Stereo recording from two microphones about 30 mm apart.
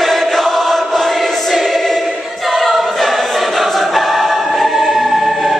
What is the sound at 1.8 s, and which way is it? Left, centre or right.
Choir, centre.